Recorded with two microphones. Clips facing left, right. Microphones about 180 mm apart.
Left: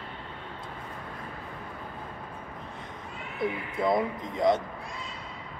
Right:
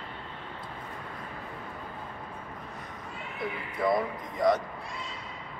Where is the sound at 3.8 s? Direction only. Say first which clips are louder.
Left 1 dB; 25° left (ahead or behind).